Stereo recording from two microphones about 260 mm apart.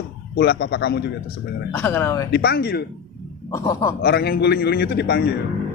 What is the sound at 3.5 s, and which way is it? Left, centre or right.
Speech, centre.